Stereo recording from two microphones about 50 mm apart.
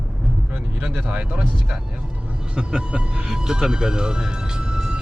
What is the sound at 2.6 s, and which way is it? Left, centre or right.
Speech, centre.